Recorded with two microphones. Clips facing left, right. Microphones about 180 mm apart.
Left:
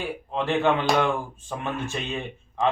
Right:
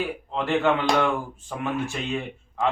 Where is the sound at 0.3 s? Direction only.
15° left (ahead or behind).